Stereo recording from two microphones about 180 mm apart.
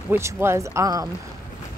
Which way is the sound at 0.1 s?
15° right (ahead or behind).